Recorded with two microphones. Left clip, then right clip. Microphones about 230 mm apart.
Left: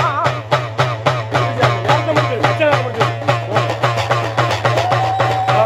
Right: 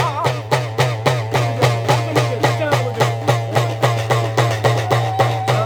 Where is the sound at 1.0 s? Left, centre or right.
Right.